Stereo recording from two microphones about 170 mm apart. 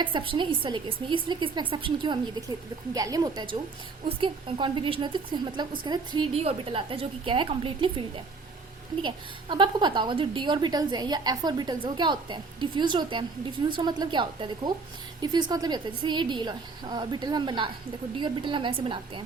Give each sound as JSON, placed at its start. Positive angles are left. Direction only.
{"t": 0.0, "sound": "a woman's voice", "side_deg": -30}